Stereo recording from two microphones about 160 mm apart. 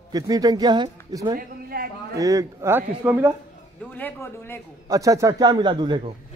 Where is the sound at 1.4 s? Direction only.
70° right (ahead or behind).